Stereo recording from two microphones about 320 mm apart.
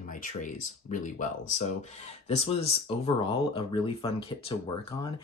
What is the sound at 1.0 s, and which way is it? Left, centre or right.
Speech, left.